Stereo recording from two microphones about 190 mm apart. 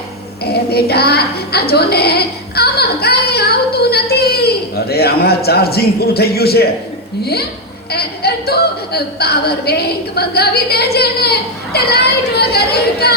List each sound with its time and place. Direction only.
0.4 s a sound: 55° left (ahead or behind)
4.1 s speech: 55° left (ahead or behind)
7.9 s a woman's voice: 55° left (ahead or behind)